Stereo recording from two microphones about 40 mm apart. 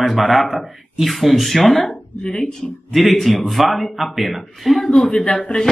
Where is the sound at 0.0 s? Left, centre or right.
Centre.